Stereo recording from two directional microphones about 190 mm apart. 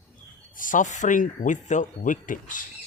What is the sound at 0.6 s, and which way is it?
Speech, 40° left (ahead or behind).